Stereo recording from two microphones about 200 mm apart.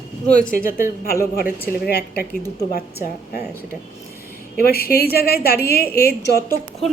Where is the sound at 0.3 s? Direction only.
40° left (ahead or behind).